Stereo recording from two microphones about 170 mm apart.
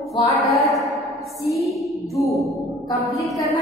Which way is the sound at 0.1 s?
20° left (ahead or behind).